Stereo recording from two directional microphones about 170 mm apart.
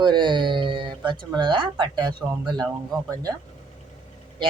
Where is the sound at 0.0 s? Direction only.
25° right (ahead or behind).